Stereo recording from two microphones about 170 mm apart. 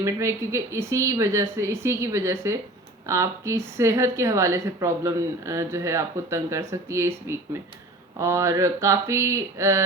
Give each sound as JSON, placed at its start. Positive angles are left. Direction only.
{"t": 0.0, "sound": "a woman's voice", "side_deg": -15}